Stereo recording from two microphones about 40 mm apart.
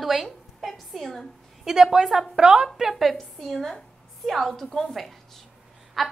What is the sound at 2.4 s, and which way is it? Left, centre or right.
Speech, right.